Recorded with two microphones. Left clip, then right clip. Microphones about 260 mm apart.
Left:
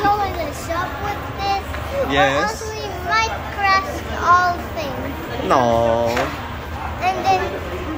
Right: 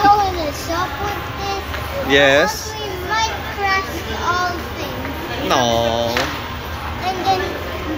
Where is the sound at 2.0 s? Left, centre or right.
Centre.